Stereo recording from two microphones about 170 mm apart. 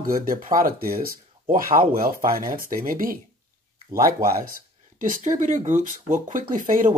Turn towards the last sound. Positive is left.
turn(degrees=-50)  # may be behind; listen again after turning